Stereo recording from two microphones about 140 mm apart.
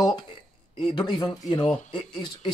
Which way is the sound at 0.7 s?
35° left (ahead or behind).